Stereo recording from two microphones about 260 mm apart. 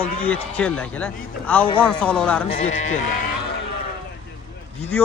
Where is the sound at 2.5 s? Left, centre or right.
Left.